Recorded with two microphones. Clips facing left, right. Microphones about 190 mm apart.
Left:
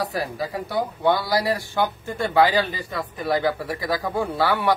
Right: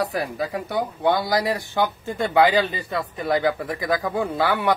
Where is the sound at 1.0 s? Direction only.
20° right (ahead or behind).